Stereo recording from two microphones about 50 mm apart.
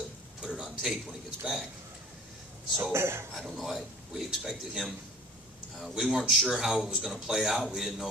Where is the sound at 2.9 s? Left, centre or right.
Right.